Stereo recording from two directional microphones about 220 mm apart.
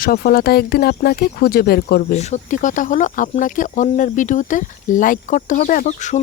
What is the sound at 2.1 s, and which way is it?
Speech, 30° left (ahead or behind).